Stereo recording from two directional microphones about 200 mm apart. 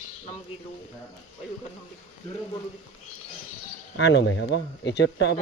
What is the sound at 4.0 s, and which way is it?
Speech, 65° left (ahead or behind).